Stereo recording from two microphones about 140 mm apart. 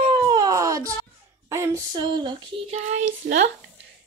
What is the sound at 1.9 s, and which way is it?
Speech, 35° right (ahead or behind).